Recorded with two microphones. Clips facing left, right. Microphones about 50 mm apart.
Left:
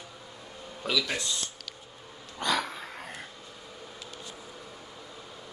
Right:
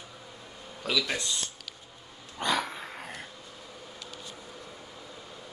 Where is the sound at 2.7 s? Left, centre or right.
Centre.